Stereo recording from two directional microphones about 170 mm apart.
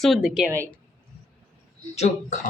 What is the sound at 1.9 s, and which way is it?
Speech, 40° left (ahead or behind).